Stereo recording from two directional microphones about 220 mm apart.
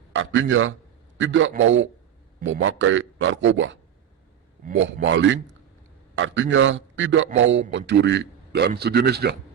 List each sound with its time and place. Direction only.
0.1 s a man's voice: 60° right (ahead or behind)
4.8 s a man's voice: 60° right (ahead or behind)